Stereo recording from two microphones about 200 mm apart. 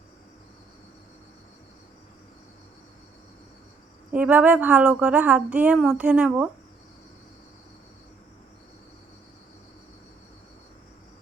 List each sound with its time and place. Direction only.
4.1 s speech: 5° right (ahead or behind)